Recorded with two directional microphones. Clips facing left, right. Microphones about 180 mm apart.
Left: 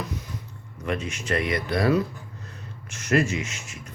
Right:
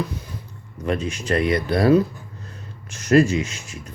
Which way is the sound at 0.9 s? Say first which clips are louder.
Right 5 dB; 35° right (ahead or behind).